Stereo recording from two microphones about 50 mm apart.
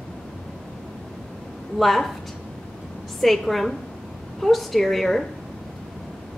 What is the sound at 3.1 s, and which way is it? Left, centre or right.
A woman's voice, centre.